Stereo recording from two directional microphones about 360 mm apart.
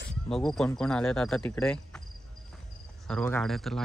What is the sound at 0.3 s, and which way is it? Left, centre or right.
Speech, centre.